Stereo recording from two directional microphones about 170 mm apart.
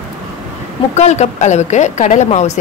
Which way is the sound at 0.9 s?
40° left (ahead or behind).